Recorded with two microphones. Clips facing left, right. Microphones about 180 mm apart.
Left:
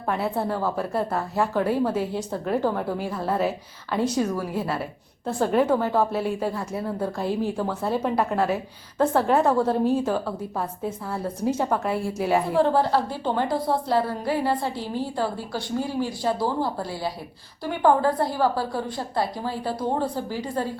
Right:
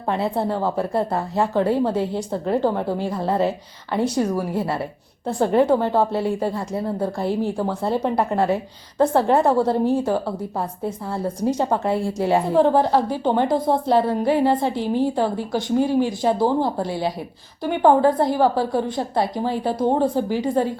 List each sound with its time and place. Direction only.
0.1 s a woman's voice: 15° right (ahead or behind)
7.2 s speech: 15° left (ahead or behind)
7.6 s a woman's voice: 15° right (ahead or behind)